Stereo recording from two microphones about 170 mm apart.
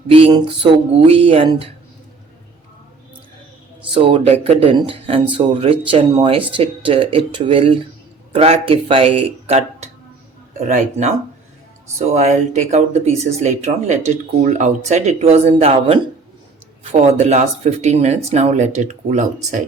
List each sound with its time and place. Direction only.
0.1 s speech: 30° right (ahead or behind)
3.9 s speech: 30° right (ahead or behind)